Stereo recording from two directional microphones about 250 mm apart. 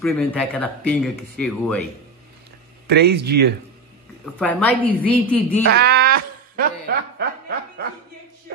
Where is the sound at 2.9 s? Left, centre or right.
Right.